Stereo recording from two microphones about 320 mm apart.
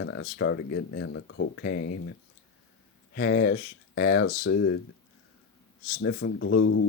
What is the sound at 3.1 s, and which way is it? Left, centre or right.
Speech, left.